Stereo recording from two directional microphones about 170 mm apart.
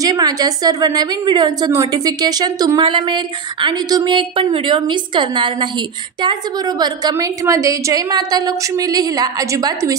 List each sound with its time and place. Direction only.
0.0 s a woman's voice: 25° right (ahead or behind)
6.8 s a woman's voice: 25° right (ahead or behind)